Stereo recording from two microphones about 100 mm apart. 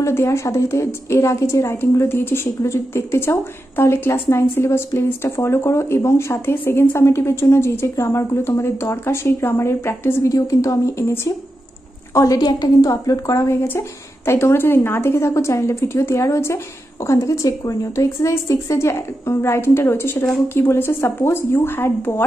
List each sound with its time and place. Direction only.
0.0 s a woman's voice: 25° left (ahead or behind)